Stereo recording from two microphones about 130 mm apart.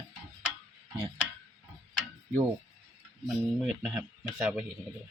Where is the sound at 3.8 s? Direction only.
5° right (ahead or behind).